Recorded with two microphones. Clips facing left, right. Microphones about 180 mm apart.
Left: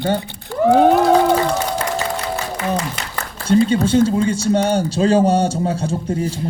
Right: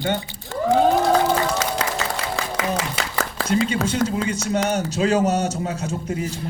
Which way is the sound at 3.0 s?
90° right.